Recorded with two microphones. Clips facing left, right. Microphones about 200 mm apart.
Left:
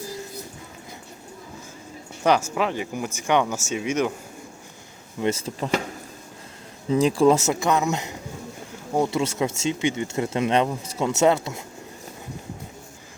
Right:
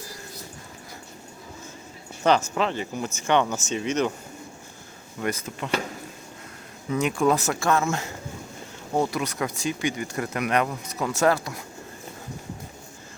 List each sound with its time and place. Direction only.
2.2 s speech: 10° left (ahead or behind)
5.2 s speech: 25° left (ahead or behind)
6.8 s speech: 30° left (ahead or behind)